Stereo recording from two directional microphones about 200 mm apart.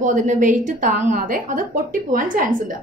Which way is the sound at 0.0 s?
40° right (ahead or behind).